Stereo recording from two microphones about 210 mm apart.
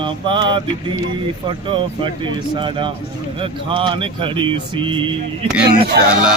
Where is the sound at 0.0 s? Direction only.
25° right (ahead or behind).